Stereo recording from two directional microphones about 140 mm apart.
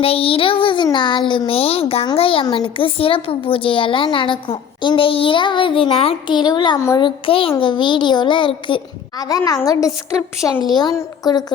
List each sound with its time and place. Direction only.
0.0 s speech: 40° left (ahead or behind)
6.7 s a woman's voice: 20° left (ahead or behind)
7.0 s a woman's voice: 40° left (ahead or behind)